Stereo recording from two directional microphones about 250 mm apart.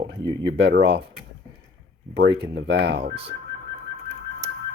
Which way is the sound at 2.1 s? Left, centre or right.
Right.